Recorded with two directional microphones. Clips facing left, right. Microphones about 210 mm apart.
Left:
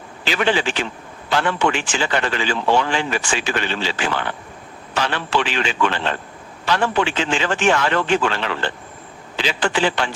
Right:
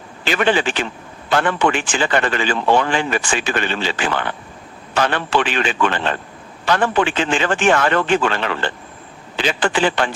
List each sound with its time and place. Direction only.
0.3 s a man's voice: 50° right (ahead or behind)